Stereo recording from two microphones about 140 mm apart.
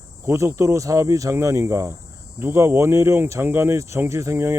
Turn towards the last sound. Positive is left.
turn(degrees=-20)  # may be behind; listen again after turning